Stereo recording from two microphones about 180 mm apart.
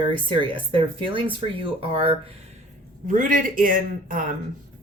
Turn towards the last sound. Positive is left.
turn(degrees=-50)  # may be behind; listen again after turning